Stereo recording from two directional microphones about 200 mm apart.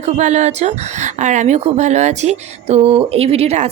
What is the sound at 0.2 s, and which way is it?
A woman's voice, 35° right (ahead or behind).